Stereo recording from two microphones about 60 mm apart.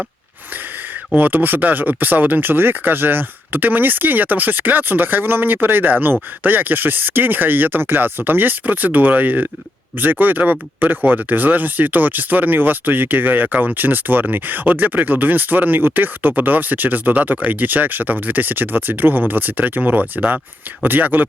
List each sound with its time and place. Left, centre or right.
1.1 s speech: right